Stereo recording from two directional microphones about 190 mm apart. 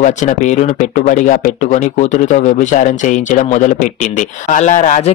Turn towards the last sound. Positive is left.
turn(degrees=40)  # may be behind; listen again after turning